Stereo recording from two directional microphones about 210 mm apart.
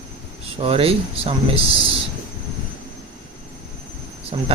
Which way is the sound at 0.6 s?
25° right (ahead or behind).